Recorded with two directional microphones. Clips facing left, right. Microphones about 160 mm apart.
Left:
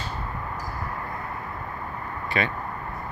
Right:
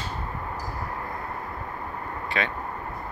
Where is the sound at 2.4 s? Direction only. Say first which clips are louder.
Left 2 dB; 5° left (ahead or behind).